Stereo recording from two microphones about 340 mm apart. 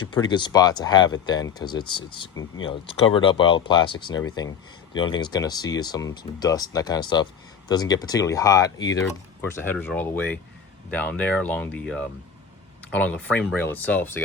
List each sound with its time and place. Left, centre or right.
0.0 s speech: centre